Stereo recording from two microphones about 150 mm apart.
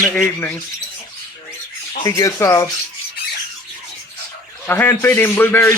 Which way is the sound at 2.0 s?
20° left (ahead or behind).